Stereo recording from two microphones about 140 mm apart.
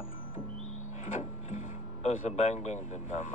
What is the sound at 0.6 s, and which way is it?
Music, 60° left (ahead or behind).